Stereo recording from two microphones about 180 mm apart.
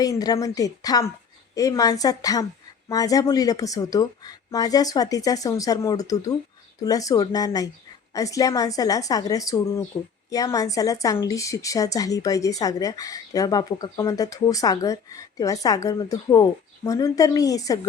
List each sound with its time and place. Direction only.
0.0 s a woman's voice: 20° left (ahead or behind)